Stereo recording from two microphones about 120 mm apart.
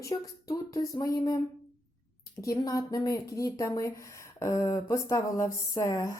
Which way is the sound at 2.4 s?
25° left (ahead or behind).